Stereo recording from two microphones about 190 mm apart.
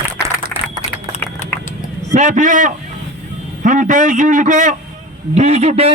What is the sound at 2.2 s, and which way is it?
A man's voice, 40° right (ahead or behind).